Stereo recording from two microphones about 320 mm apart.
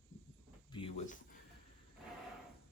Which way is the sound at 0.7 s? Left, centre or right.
Centre.